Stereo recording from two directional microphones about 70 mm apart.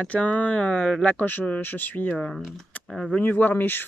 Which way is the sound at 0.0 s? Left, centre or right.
Left.